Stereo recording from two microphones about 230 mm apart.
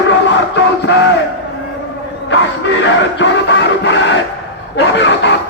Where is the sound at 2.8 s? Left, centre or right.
Left.